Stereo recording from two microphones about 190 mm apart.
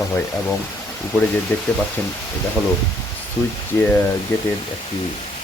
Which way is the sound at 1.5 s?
10° left (ahead or behind).